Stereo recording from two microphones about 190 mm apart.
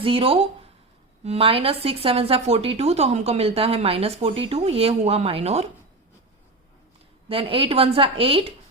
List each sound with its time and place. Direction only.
0.0 s a woman's voice: 30° right (ahead or behind)
7.3 s a woman's voice: 30° right (ahead or behind)